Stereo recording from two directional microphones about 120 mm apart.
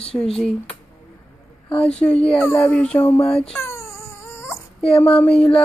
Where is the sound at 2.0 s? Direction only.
10° left (ahead or behind).